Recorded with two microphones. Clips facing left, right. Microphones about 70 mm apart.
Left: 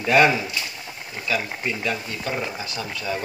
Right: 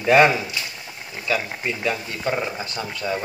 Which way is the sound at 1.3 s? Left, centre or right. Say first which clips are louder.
Right 1 dB; centre.